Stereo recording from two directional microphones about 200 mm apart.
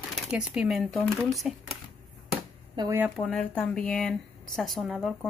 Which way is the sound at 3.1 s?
5° left (ahead or behind).